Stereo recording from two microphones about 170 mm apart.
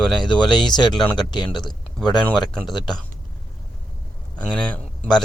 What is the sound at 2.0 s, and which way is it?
Speech, 5° left (ahead or behind).